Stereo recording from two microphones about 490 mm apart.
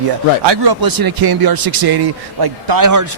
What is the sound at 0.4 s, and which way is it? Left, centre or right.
Speech, right.